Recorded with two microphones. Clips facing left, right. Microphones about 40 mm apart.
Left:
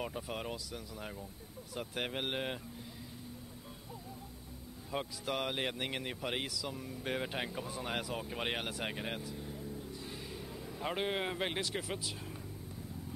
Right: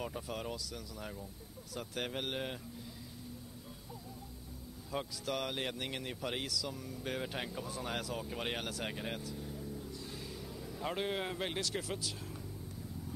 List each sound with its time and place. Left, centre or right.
0.0 s speech: centre
4.9 s speech: left